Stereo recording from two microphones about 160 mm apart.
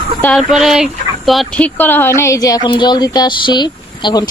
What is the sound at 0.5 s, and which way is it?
Speech, 5° right (ahead or behind).